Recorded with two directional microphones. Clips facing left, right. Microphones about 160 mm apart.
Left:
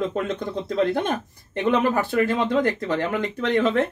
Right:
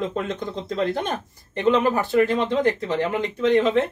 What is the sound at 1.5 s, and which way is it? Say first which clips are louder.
Speech: right 1 dB; 60° left (ahead or behind).